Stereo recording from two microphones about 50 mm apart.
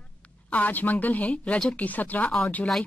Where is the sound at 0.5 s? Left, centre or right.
Left.